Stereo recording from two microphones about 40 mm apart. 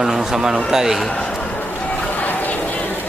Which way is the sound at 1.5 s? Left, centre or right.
Left.